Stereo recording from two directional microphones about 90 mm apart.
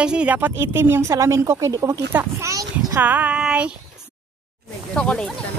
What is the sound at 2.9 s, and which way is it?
Speech, 20° right (ahead or behind).